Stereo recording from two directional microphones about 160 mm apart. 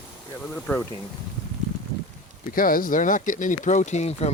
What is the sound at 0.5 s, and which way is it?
Speech, 5° left (ahead or behind).